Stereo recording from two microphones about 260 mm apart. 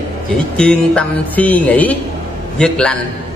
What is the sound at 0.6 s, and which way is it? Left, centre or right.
Speech, centre.